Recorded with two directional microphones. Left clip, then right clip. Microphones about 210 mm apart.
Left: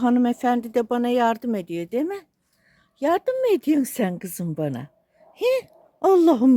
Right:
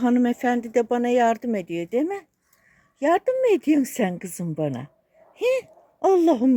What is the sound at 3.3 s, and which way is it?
Speech, 10° left (ahead or behind).